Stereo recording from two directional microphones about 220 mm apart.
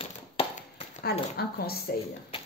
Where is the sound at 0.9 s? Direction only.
45° left (ahead or behind).